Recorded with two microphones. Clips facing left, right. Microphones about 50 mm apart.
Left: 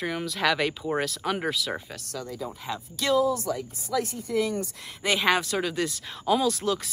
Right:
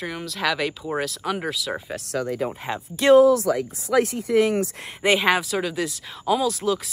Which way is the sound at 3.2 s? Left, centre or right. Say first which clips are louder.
Right 9 dB; right.